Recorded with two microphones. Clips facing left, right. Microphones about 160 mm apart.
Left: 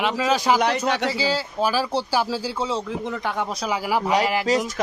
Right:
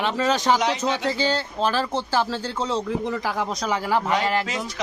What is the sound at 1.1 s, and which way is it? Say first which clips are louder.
Speech: even; 5° left (ahead or behind).